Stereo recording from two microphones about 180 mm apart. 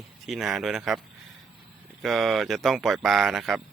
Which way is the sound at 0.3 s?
Centre (ahead or behind).